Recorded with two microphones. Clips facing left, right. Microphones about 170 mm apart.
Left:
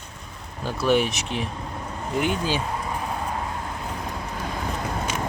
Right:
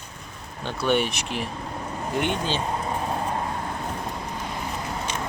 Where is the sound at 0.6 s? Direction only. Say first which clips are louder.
Left 2 dB; 5° left (ahead or behind).